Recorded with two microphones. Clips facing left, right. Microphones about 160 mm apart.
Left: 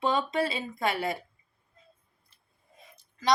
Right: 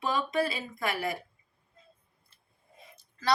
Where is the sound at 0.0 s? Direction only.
25° left (ahead or behind).